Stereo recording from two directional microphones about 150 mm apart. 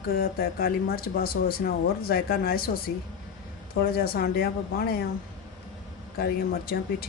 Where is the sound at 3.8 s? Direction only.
90° left.